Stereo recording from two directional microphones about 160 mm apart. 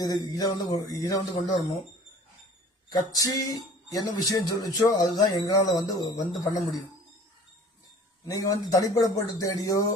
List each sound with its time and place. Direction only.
0.0 s speech: 25° left (ahead or behind)
2.9 s speech: 25° left (ahead or behind)
8.3 s speech: 20° left (ahead or behind)